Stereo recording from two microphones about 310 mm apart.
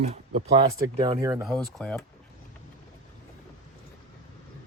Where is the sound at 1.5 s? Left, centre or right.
Centre.